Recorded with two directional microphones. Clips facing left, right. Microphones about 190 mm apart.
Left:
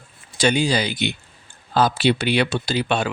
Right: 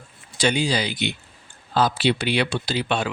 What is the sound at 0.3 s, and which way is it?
Speech, 45° left (ahead or behind).